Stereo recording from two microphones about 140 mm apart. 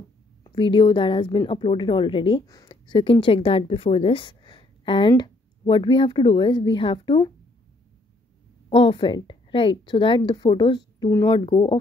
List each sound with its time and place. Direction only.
0.4 s a woman's voice: 35° left (ahead or behind)
2.4 s a woman's voice: 25° left (ahead or behind)
8.6 s a woman's voice: 40° left (ahead or behind)